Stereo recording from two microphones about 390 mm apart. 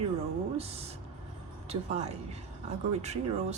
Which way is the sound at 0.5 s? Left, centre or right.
Centre.